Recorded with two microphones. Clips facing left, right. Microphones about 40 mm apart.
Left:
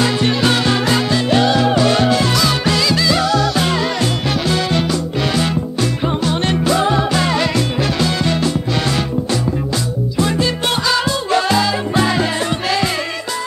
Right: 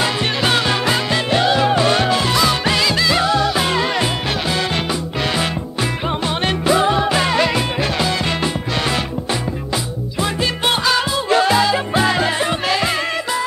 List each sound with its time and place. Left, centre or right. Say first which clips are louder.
0.0 s music: left 3 dB; centre